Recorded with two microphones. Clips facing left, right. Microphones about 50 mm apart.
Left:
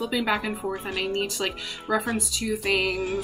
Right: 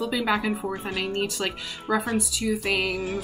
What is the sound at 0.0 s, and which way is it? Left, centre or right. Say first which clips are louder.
Speech: right 1 dB; centre.